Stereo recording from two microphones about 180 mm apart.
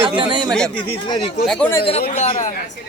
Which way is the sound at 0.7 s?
25° left (ahead or behind).